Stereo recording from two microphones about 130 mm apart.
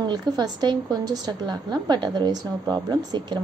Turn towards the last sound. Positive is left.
turn(degrees=-35)  # may be behind; listen again after turning